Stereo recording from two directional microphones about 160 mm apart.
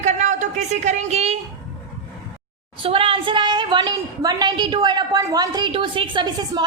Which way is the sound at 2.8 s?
35° right (ahead or behind).